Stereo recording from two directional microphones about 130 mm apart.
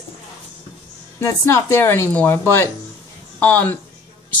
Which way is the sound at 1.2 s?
20° left (ahead or behind).